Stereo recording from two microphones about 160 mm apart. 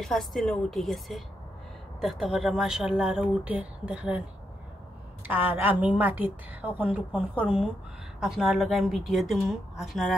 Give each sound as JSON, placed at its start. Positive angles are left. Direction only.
{"t": 0.0, "sound": "speech", "side_deg": 0}
{"t": 5.3, "sound": "a woman's voice", "side_deg": -10}